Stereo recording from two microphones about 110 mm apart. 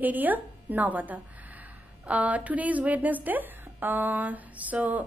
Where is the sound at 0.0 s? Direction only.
15° right (ahead or behind).